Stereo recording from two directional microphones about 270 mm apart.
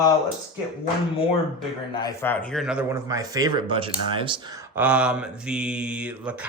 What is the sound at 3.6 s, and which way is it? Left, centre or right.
Speech, centre.